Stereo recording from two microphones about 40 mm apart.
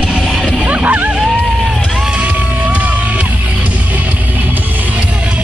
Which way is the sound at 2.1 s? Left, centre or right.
Right.